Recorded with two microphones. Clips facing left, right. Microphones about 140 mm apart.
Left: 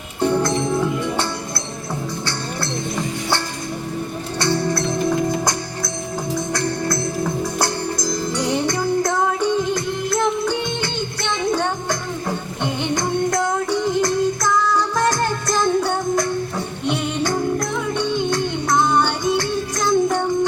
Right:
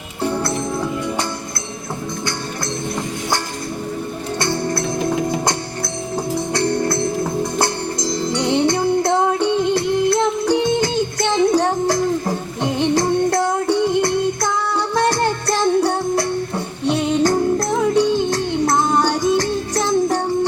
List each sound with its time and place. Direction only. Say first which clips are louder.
0.2 s music: left 3 dB; 5° right (ahead or behind)
6.3 s music: right 4 dB; 30° right (ahead or behind)